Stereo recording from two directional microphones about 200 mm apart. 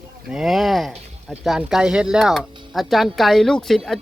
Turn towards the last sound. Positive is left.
turn(degrees=0)  # may be behind; listen again after turning